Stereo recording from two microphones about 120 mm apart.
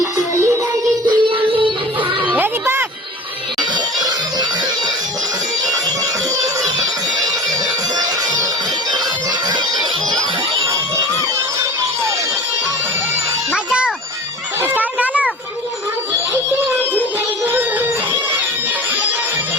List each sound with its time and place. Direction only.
1.0 s music: 45° right (ahead or behind)
2.3 s music: 15° right (ahead or behind)
3.6 s music: 35° right (ahead or behind)
13.5 s a sound: 10° right (ahead or behind)
17.4 s music: 20° right (ahead or behind)